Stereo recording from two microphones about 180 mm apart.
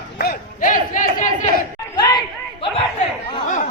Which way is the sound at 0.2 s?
55° left (ahead or behind).